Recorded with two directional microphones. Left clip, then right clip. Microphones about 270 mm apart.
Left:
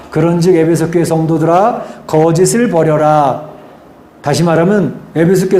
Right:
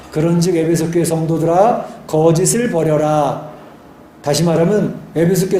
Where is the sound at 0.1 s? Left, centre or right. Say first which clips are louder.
Left 6 dB; left.